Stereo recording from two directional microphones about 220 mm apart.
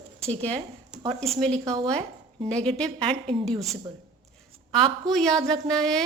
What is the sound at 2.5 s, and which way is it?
Speech, 5° left (ahead or behind).